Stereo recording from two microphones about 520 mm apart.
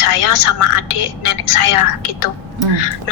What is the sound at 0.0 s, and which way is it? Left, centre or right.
Speech, left.